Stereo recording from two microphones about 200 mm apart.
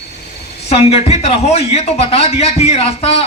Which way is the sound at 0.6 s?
30° left (ahead or behind).